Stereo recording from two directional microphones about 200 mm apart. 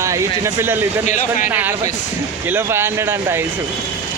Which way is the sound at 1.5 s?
10° right (ahead or behind).